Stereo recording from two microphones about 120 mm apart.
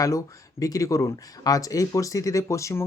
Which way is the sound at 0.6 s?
30° left (ahead or behind).